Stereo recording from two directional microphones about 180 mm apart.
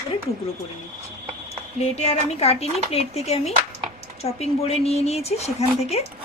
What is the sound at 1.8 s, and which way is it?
Speech, 35° left (ahead or behind).